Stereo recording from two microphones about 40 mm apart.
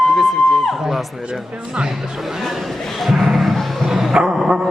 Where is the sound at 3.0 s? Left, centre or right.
Centre.